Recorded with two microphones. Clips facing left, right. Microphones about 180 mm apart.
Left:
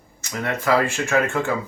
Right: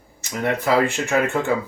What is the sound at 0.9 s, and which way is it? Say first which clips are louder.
Speech: even; 15° right (ahead or behind).